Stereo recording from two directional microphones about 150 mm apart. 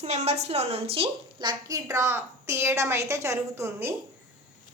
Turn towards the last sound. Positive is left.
turn(degrees=-20)  # may be behind; listen again after turning